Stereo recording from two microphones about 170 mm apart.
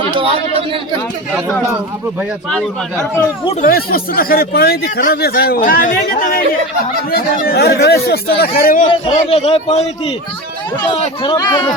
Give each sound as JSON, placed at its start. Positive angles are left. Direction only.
{"t": 0.2, "sound": "speech", "side_deg": -35}
{"t": 3.6, "sound": "speech", "side_deg": 60}
{"t": 8.9, "sound": "a man's voice", "side_deg": 35}
{"t": 11.2, "sound": "speech", "side_deg": 25}